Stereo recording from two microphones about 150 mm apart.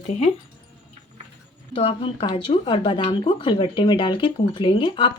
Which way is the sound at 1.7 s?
35° left (ahead or behind).